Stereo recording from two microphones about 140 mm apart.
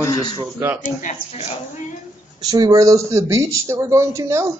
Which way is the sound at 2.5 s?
25° right (ahead or behind).